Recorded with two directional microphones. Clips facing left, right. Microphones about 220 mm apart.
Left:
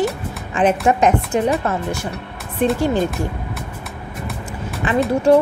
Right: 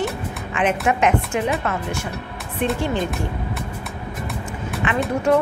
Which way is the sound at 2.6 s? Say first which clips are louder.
Left 5 dB; 40° left (ahead or behind).